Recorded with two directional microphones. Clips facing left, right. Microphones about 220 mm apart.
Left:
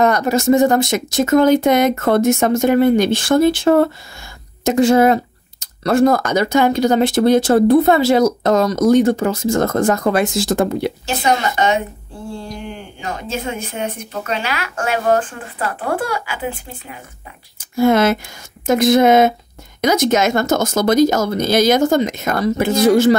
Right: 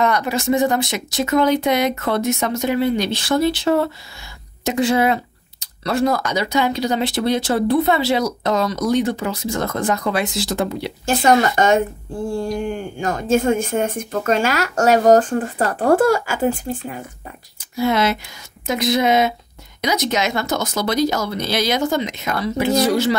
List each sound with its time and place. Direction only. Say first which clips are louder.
0.0 s speech: left 5 dB; 45° left (ahead or behind)
11.1 s speech: right 6 dB; 45° right (ahead or behind)
17.7 s speech: left 5 dB; 50° left (ahead or behind)